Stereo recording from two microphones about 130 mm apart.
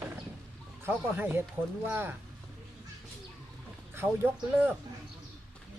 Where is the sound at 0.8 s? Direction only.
15° right (ahead or behind).